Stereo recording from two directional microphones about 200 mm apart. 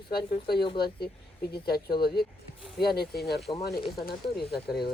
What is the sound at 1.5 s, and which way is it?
Speech, 50° left (ahead or behind).